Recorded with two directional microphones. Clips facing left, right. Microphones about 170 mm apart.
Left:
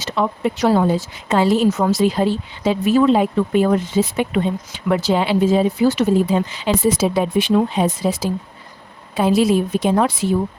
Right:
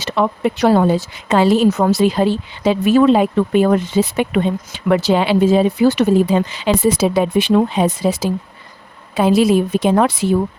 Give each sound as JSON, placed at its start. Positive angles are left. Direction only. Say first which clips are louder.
{"t": 0.0, "sound": "speech", "louder": "right 3 dB", "side_deg": -65}
{"t": 1.8, "sound": "speech", "louder": "right 2 dB", "side_deg": -65}